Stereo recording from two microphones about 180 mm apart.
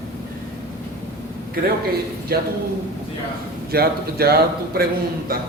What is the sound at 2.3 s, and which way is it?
Speech, 60° right (ahead or behind).